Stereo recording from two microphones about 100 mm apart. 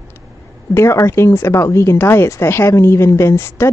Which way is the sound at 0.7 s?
25° left (ahead or behind).